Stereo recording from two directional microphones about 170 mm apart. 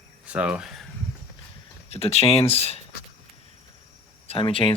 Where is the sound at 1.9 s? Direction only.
35° left (ahead or behind).